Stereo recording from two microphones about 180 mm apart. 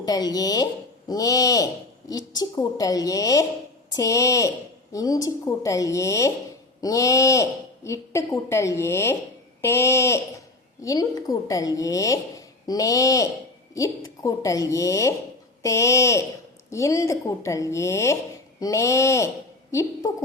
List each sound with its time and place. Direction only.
0.0 s a woman's voice: 20° left (ahead or behind)